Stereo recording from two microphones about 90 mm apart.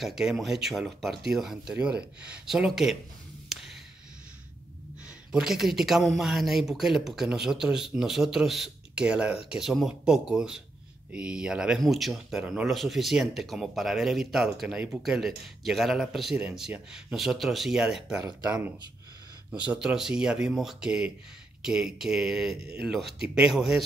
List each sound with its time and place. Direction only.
0.0 s speech: 5° right (ahead or behind)
3.4 s a sound: centre (ahead or behind)
5.3 s speech: 5° right (ahead or behind)
18.4 s speech: 20° right (ahead or behind)